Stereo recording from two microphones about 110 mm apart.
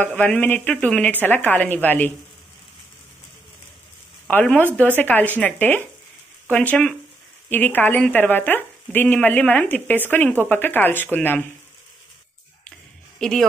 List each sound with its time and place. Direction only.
0.0 s speech: 15° left (ahead or behind)
4.3 s speech: 15° left (ahead or behind)
13.2 s speech: 5° left (ahead or behind)